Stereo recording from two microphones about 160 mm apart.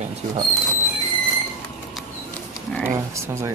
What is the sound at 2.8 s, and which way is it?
Speech, 15° right (ahead or behind).